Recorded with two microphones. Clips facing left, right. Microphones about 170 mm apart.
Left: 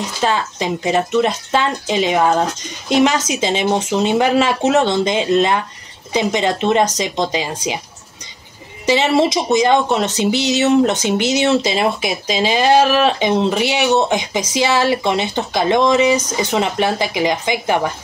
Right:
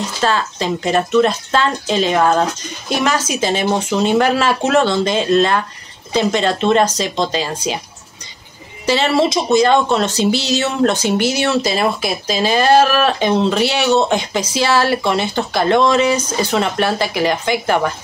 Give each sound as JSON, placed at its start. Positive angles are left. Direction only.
{"t": 0.2, "sound": "speech", "side_deg": 15}
{"t": 8.8, "sound": "speech", "side_deg": 20}